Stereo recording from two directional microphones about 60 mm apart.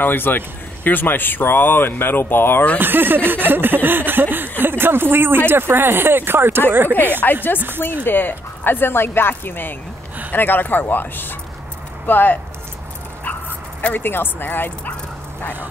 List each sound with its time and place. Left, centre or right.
0.0 s speech: left
2.8 s speech: right
7.5 s speech: left
13.2 s dog: left